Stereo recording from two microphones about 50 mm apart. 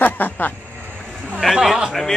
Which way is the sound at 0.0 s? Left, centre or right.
Left.